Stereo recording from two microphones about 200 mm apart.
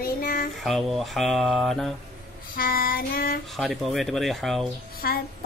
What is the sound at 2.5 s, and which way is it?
Child singing, 45° left (ahead or behind).